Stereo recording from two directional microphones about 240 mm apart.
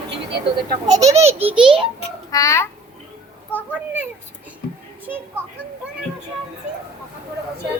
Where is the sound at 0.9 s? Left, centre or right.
Centre.